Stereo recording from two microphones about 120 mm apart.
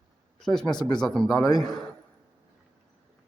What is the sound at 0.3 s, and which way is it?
Speech, 5° left (ahead or behind).